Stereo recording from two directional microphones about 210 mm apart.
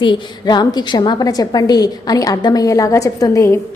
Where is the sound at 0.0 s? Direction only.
20° left (ahead or behind).